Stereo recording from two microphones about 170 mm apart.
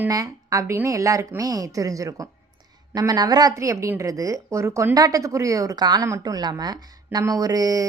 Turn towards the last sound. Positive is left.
turn(degrees=-20)  # may be behind; listen again after turning